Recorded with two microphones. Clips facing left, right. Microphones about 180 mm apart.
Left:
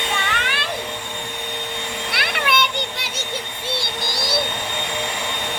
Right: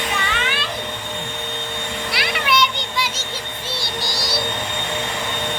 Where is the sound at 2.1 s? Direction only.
60° left (ahead or behind).